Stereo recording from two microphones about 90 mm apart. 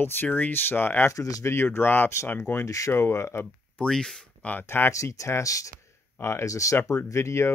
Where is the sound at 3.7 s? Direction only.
10° left (ahead or behind).